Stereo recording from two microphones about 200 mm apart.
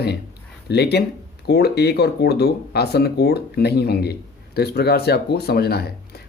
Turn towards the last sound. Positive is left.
turn(degrees=50)  # may be behind; listen again after turning